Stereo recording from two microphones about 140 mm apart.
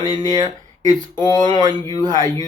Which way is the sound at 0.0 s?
30° right (ahead or behind).